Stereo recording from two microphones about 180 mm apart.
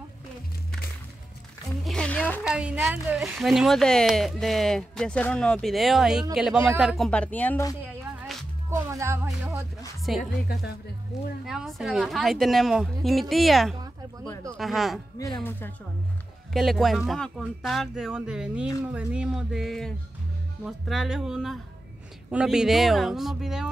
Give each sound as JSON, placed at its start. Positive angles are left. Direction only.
{"t": 1.9, "sound": "music", "side_deg": 5}
{"t": 2.4, "sound": "a woman's voice", "side_deg": -5}
{"t": 8.2, "sound": "music", "side_deg": 0}
{"t": 8.6, "sound": "music", "side_deg": -15}
{"t": 10.1, "sound": "a woman's voice", "side_deg": 0}
{"t": 10.5, "sound": "speech", "side_deg": 65}
{"t": 11.1, "sound": "a woman's voice", "side_deg": 0}
{"t": 15.1, "sound": "speech", "side_deg": 20}
{"t": 16.5, "sound": "a woman's voice", "side_deg": 0}